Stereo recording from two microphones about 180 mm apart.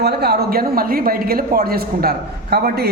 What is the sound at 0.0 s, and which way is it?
Speech, 65° right (ahead or behind).